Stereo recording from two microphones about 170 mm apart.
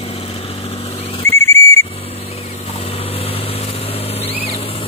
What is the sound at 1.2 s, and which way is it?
Whistle, 15° left (ahead or behind).